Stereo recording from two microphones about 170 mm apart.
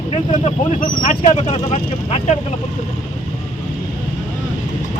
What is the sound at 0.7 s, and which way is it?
Speech, 50° left (ahead or behind).